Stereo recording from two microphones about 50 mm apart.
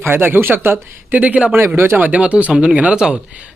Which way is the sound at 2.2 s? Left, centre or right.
Right.